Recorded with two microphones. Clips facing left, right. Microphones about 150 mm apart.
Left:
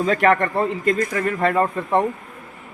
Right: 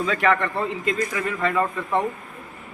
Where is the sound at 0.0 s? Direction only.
45° left (ahead or behind).